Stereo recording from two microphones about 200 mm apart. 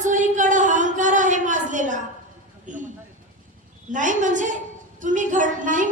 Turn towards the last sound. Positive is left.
turn(degrees=-40)  # may be behind; listen again after turning